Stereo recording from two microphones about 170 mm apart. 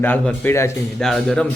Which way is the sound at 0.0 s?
10° left (ahead or behind).